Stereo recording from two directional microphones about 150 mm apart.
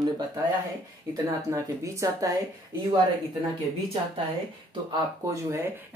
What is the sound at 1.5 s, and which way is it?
Speech, 20° right (ahead or behind).